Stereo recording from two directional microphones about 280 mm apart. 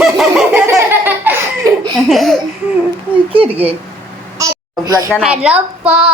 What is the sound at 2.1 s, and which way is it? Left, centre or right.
Speech, centre.